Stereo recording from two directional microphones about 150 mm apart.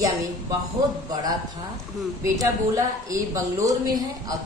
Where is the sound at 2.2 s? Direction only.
20° right (ahead or behind).